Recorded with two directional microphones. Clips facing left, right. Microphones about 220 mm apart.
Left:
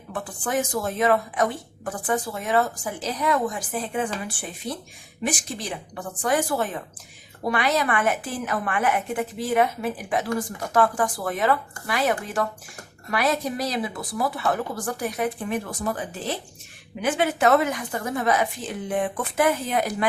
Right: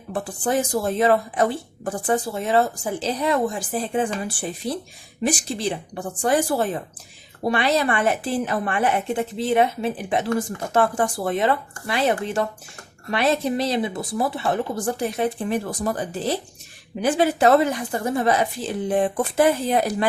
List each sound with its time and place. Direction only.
0.1 s a woman's voice: 30° right (ahead or behind)
5.2 s a woman's voice: 30° right (ahead or behind)